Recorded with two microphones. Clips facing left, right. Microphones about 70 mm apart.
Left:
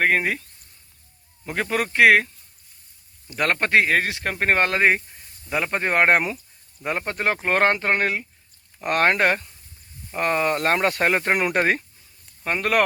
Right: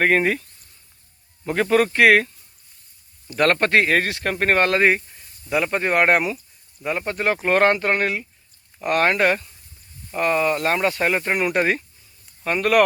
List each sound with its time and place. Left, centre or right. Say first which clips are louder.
0.0 s speech: right 3 dB; centre
1.5 s speech: right 6 dB; centre
3.3 s speech: right 2 dB; centre
5.5 s speech: right 3 dB; left
12.5 s speech: right 3 dB; left